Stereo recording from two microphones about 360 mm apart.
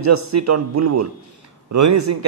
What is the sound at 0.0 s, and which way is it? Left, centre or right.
Speech, right.